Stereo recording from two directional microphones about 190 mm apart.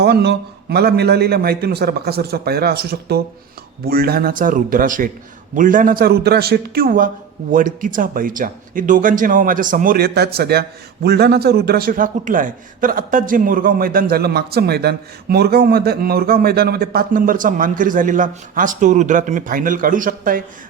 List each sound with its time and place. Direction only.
0.0 s a man's voice: 60° right (ahead or behind)